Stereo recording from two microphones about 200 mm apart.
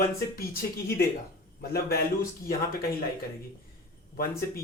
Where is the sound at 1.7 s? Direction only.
50° left (ahead or behind).